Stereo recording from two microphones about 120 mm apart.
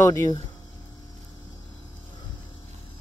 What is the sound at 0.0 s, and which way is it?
Speech, 25° left (ahead or behind).